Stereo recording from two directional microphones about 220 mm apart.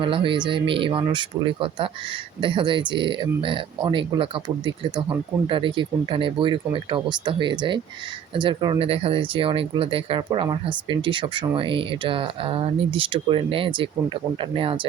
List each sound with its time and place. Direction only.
0.0 s speech: 25° right (ahead or behind)